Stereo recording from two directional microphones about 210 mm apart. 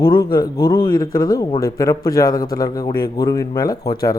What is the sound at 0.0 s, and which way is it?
Speech, 20° left (ahead or behind).